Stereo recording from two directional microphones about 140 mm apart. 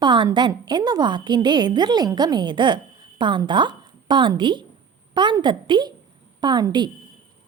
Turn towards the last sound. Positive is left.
turn(degrees=-30)  # may be behind; listen again after turning